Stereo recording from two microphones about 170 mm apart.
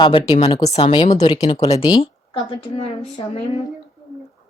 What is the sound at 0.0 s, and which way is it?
Speech, 30° left (ahead or behind).